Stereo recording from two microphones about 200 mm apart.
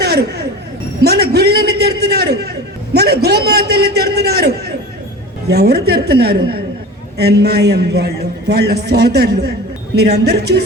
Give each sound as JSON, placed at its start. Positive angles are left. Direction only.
{"t": 0.0, "sound": "music", "side_deg": -55}
{"t": 1.0, "sound": "a sound", "side_deg": -55}
{"t": 5.5, "sound": "a man's voice", "side_deg": -55}